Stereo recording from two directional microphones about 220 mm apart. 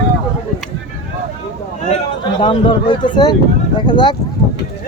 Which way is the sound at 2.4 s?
25° left (ahead or behind).